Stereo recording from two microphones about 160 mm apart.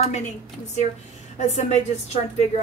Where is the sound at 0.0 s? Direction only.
45° left (ahead or behind).